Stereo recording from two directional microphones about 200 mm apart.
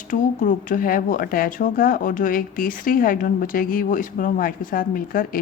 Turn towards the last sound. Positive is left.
turn(degrees=45)  # may be behind; listen again after turning